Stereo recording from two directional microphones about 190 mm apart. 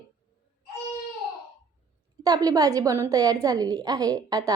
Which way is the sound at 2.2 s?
20° right (ahead or behind).